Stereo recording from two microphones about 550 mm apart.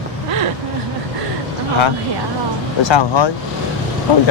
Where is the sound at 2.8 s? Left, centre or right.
Left.